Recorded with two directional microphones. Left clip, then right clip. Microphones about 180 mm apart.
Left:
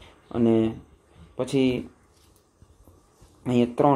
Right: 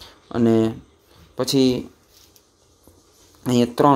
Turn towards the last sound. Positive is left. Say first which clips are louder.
# right 4 dB
turn(degrees=-30)  # may be behind; listen again after turning